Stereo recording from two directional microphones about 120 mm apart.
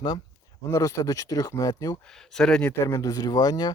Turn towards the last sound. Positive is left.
turn(degrees=30)  # may be behind; listen again after turning